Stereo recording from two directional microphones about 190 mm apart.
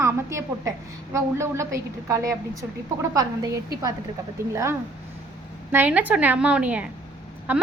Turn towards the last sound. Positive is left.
turn(degrees=-10)  # may be behind; listen again after turning